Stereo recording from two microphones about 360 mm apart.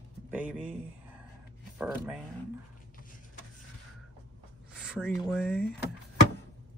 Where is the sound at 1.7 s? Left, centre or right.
Centre.